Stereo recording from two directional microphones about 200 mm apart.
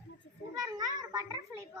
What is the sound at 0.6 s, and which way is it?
Speech, 20° right (ahead or behind).